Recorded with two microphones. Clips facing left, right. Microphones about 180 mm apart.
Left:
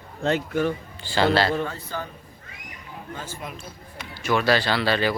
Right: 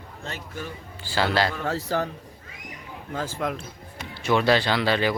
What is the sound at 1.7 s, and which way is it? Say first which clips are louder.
Speech: right 7 dB; 85° right.